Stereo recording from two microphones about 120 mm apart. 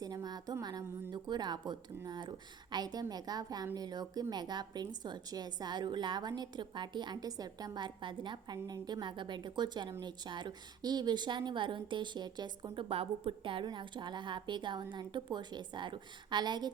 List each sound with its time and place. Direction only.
0.0 s a woman's voice: 30° right (ahead or behind)
12.7 s a woman's voice: 50° right (ahead or behind)